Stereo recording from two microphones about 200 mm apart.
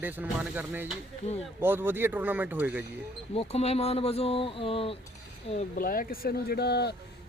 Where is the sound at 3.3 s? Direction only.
30° left (ahead or behind).